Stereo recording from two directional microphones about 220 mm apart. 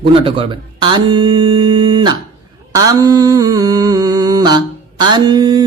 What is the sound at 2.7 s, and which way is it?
Mantra, 15° right (ahead or behind).